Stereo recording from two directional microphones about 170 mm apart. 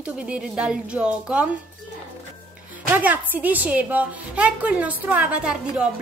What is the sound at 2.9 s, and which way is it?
A woman's voice, 10° right (ahead or behind).